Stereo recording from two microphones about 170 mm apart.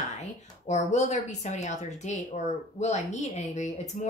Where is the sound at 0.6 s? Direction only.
40° left (ahead or behind).